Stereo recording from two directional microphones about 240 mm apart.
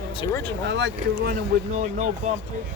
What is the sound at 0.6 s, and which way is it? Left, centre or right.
Speech, right.